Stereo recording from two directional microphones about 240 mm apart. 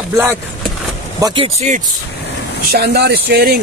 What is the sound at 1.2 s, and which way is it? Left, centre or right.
Speech, right.